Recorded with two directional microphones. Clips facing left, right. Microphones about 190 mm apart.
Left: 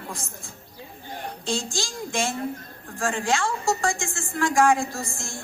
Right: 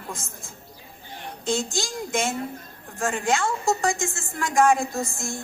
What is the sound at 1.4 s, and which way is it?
Speech, 20° right (ahead or behind).